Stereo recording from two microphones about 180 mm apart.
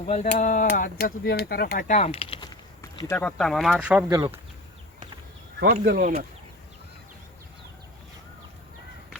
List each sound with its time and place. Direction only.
0.1 s speech: 40° left (ahead or behind)
2.9 s a sound: 20° left (ahead or behind)
3.2 s speech: 5° left (ahead or behind)
5.8 s speech: 55° right (ahead or behind)